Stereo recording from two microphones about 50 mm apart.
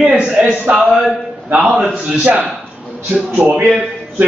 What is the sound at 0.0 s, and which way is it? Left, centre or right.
Speech, right.